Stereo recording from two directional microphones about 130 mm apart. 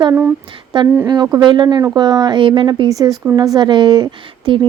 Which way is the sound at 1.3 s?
35° right (ahead or behind).